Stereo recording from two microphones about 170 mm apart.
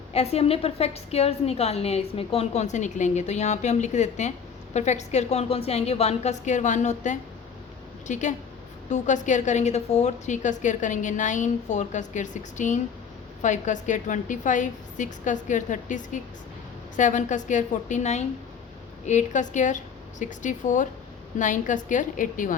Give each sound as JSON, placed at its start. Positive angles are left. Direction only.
{"t": 0.1, "sound": "a woman's voice", "side_deg": 40}